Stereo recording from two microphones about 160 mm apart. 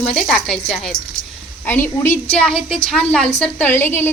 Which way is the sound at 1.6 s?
15° left (ahead or behind).